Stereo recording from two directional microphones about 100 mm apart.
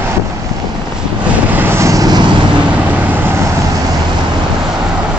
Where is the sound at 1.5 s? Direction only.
20° right (ahead or behind); by 2.3 s 45° right (ahead or behind).